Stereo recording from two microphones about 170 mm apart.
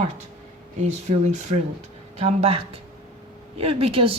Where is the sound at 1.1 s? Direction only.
40° right (ahead or behind).